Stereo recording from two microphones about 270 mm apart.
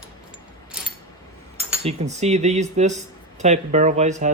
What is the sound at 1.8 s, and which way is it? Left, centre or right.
Speech, right.